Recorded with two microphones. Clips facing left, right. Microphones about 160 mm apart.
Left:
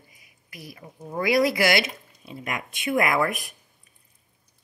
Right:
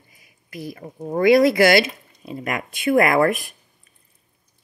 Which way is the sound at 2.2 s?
55° right (ahead or behind).